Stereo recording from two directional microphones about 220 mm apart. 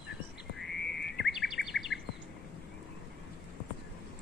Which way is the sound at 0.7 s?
50° left (ahead or behind).